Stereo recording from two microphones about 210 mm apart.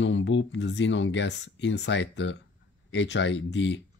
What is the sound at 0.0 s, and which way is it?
Speech, 60° left (ahead or behind).